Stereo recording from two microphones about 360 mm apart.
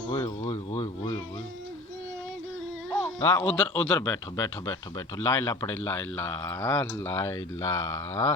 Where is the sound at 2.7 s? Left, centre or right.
Centre.